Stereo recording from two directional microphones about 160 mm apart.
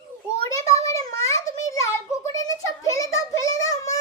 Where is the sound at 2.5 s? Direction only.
20° left (ahead or behind).